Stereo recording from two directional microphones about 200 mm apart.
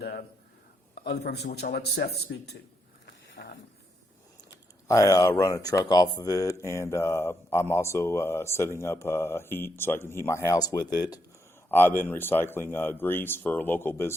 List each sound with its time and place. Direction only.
1.0 s speech: 55° left (ahead or behind)
3.1 s a sound: 65° left (ahead or behind)
4.9 s speech: 15° left (ahead or behind)